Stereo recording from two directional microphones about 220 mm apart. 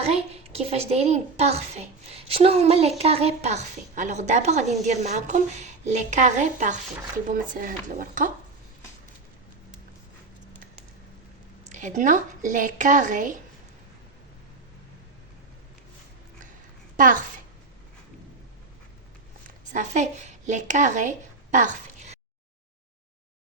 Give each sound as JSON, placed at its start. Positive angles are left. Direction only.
{"t": 0.0, "sound": "a woman's voice", "side_deg": -30}
{"t": 11.7, "sound": "a woman's voice", "side_deg": -35}
{"t": 17.0, "sound": "a woman's voice", "side_deg": -35}
{"t": 19.5, "sound": "speech", "side_deg": -35}